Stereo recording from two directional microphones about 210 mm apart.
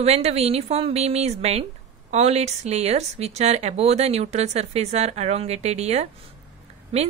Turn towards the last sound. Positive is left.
turn(degrees=-30)  # may be behind; listen again after turning